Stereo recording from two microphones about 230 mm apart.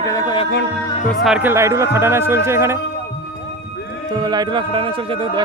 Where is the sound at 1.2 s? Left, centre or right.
Centre.